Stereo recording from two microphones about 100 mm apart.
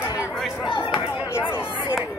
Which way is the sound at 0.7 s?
55° left (ahead or behind).